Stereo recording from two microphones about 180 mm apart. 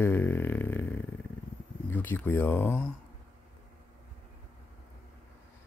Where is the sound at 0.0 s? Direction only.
10° left (ahead or behind).